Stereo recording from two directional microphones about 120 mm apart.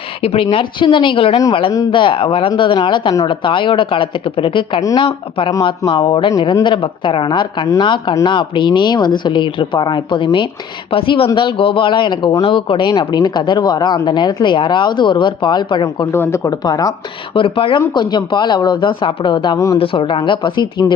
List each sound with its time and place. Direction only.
0.2 s speech: 55° left (ahead or behind)
16.1 s speech: 20° left (ahead or behind)
17.3 s speech: 45° left (ahead or behind)
19.5 s speech: 25° left (ahead or behind)
19.8 s speech: 50° left (ahead or behind)